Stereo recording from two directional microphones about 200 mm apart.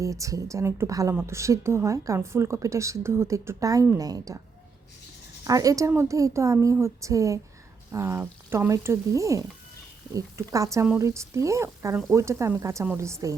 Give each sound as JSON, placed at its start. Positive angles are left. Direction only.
{"t": 0.0, "sound": "a woman's voice", "side_deg": -15}
{"t": 5.5, "sound": "a woman's voice", "side_deg": -15}